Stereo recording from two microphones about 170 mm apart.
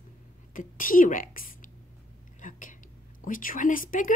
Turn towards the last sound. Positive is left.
turn(degrees=55)  # may be behind; listen again after turning